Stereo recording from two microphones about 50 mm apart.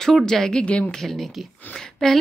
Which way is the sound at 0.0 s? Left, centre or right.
Centre.